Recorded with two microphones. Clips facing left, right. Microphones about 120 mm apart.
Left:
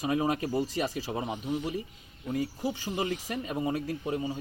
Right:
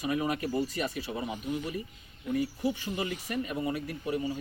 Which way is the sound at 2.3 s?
35° left (ahead or behind).